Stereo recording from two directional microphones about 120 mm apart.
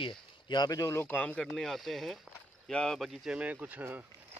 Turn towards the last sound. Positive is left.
turn(degrees=-15)  # may be behind; listen again after turning